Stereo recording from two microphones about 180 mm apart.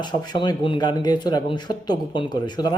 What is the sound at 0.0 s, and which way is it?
A man's voice, 25° left (ahead or behind).